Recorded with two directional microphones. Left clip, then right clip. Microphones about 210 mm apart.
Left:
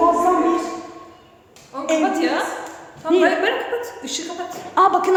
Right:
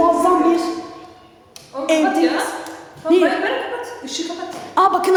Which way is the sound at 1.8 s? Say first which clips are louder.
Right 3 dB; 25° left (ahead or behind).